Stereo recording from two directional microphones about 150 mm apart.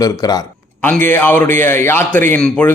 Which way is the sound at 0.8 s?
10° left (ahead or behind).